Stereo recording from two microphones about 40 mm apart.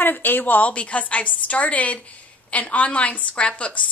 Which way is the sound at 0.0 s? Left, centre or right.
Left.